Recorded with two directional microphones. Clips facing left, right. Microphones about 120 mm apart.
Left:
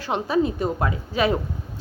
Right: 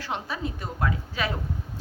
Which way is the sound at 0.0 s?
20° left (ahead or behind).